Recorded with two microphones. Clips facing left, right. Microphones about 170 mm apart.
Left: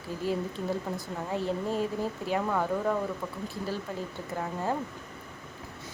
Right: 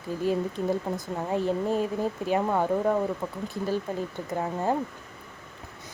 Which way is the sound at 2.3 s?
25° right (ahead or behind).